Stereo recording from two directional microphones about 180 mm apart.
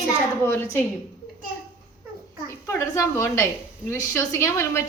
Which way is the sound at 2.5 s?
15° left (ahead or behind).